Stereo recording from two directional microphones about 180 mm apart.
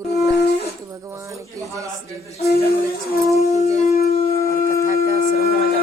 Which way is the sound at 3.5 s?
35° left (ahead or behind).